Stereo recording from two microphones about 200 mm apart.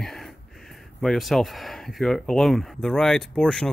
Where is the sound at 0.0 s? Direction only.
Centre (ahead or behind).